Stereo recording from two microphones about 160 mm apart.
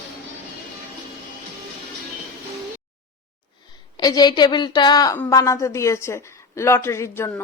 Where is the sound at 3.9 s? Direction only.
25° left (ahead or behind).